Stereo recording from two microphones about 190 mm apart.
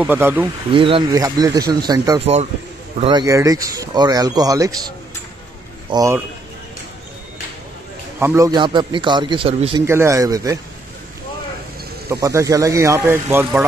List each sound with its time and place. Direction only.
0.0 s speech: 10° right (ahead or behind)
0.7 s a man's voice: 30° right (ahead or behind)
8.2 s speech: 15° right (ahead or behind); by 9.8 s 30° right (ahead or behind)
9.8 s speech: 15° right (ahead or behind)
12.1 s speech: 15° right (ahead or behind)